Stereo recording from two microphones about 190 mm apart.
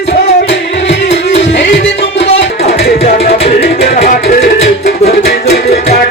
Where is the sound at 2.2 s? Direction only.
35° left (ahead or behind).